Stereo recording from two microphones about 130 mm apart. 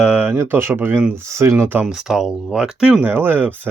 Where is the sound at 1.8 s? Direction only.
5° right (ahead or behind).